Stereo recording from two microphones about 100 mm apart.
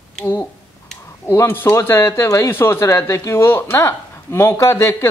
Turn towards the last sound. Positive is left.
turn(degrees=25)  # may be behind; listen again after turning